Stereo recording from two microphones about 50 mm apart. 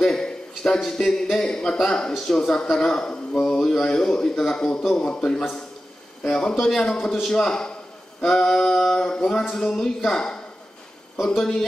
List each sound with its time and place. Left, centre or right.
0.0 s a man's voice: centre
8.2 s a sound: centre
9.0 s speech: centre